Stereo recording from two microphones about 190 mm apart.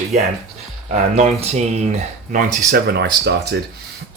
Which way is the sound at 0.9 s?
35° right (ahead or behind).